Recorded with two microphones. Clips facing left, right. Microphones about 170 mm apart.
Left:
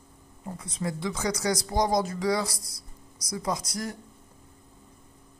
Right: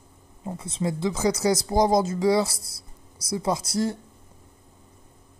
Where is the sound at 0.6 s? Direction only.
25° right (ahead or behind).